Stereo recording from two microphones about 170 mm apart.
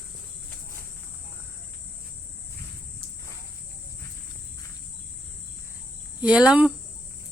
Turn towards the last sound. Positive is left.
turn(degrees=-5)  # may be behind; listen again after turning